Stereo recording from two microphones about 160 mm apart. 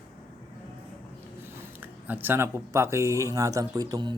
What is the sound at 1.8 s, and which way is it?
Speech, 10° right (ahead or behind).